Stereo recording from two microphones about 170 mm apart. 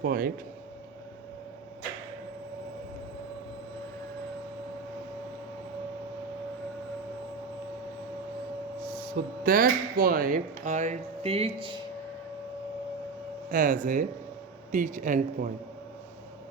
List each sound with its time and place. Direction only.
0.0 s speech: 60° right (ahead or behind)
9.1 s speech: 60° right (ahead or behind); by 11.8 s 30° right (ahead or behind)
13.5 s speech: 50° right (ahead or behind)